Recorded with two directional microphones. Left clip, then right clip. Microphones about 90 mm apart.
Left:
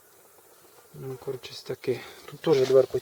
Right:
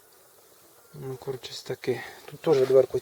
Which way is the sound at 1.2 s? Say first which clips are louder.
Even; 25° right (ahead or behind).